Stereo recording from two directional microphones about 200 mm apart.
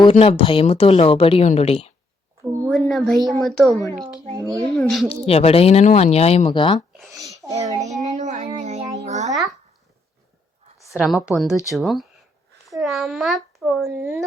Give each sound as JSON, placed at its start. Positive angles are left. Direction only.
{"t": 0.0, "sound": "speech", "side_deg": 30}
{"t": 2.6, "sound": "a sound", "side_deg": 5}
{"t": 3.4, "sound": "speech", "side_deg": 5}
{"t": 4.4, "sound": "speech", "side_deg": -15}
{"t": 4.7, "sound": "speech", "side_deg": 0}
{"t": 5.0, "sound": "speech", "side_deg": 30}
{"t": 7.1, "sound": "a sound", "side_deg": -15}
{"t": 7.5, "sound": "child singing", "side_deg": -35}
{"t": 9.0, "sound": "a sound", "side_deg": -35}
{"t": 10.9, "sound": "a child's voice", "side_deg": 0}